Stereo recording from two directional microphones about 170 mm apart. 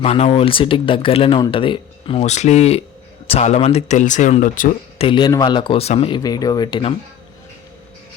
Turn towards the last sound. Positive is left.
turn(degrees=25)  # may be behind; listen again after turning